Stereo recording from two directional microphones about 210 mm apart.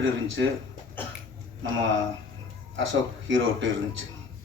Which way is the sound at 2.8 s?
65° right (ahead or behind).